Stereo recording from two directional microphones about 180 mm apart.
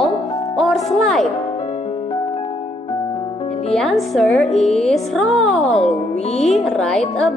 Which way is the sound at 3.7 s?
Centre (ahead or behind).